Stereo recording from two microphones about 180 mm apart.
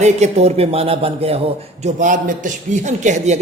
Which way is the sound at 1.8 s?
45° right (ahead or behind).